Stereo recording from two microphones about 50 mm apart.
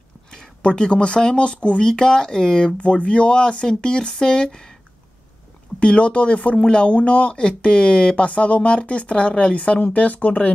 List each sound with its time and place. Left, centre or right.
0.6 s speech: centre
5.8 s speech: left